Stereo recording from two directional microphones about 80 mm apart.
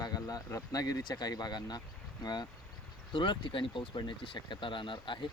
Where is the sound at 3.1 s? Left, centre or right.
Left.